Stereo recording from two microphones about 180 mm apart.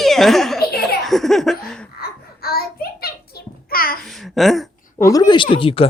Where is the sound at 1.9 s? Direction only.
55° left (ahead or behind).